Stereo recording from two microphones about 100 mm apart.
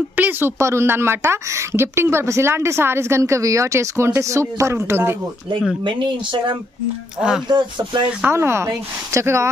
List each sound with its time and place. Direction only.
0.1 s a woman's voice: 20° right (ahead or behind)
5.9 s speech: 55° right (ahead or behind)
7.2 s speech: 5° right (ahead or behind)
7.4 s speech: 45° right (ahead or behind)
8.3 s a woman's voice: 25° right (ahead or behind)